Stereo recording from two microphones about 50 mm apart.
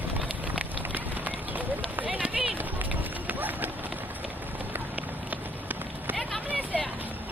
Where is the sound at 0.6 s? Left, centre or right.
Right.